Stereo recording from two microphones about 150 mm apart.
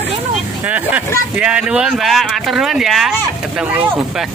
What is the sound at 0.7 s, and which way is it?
Speech, 10° right (ahead or behind).